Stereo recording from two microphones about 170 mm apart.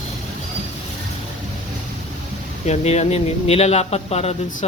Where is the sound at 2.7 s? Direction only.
40° left (ahead or behind).